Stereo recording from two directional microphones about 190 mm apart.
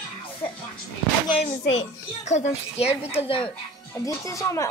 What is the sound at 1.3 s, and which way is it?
A child's voice, 30° left (ahead or behind).